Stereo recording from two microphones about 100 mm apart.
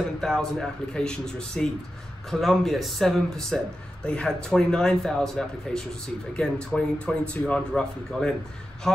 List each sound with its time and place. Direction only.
0.2 s speech: 5° left (ahead or behind)